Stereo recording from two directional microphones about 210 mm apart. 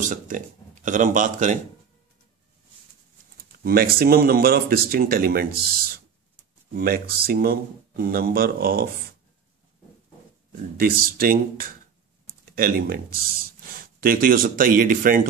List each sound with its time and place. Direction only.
0.0 s a man's voice: 35° right (ahead or behind)
3.3 s speech: 45° right (ahead or behind)
10.8 s speech: 45° right (ahead or behind)